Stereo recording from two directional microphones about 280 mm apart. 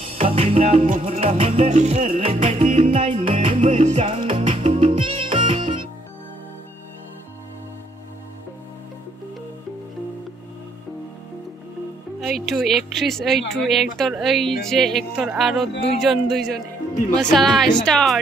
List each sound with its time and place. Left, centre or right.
0.1 s music: centre
12.2 s speech: centre